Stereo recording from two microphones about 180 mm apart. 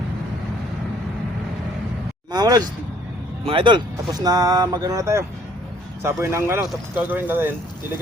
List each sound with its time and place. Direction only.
2.3 s speech: 20° right (ahead or behind)